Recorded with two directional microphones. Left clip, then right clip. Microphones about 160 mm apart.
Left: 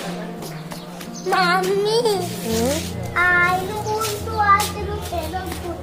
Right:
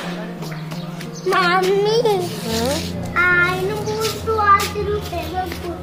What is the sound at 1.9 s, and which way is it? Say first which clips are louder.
Speech: right 2 dB; 70° left (ahead or behind).